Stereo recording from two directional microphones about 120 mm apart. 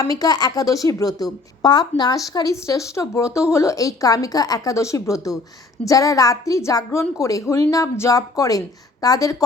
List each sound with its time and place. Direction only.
0.0 s a woman's voice: 30° left (ahead or behind)